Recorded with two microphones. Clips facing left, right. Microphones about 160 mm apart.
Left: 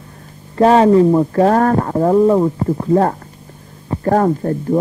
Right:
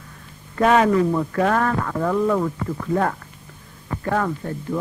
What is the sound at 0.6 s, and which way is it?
Speech, 30° left (ahead or behind).